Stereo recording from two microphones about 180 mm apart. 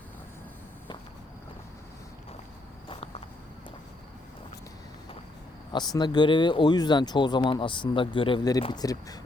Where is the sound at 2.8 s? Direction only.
30° left (ahead or behind).